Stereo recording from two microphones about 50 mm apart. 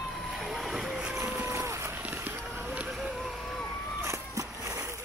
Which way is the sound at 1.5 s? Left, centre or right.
Right.